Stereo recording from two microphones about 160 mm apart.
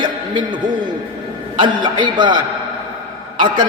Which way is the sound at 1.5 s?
30° right (ahead or behind).